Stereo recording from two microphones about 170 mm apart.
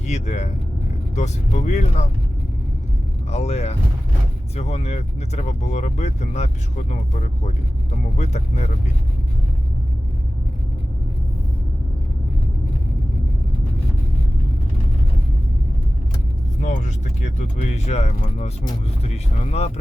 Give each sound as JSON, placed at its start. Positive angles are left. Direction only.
{"t": 0.0, "sound": "speech", "side_deg": 45}
{"t": 3.2, "sound": "speech", "side_deg": 40}
{"t": 16.6, "sound": "speech", "side_deg": 45}